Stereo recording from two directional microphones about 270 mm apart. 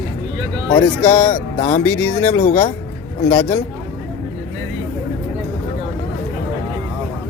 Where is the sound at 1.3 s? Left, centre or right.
Left.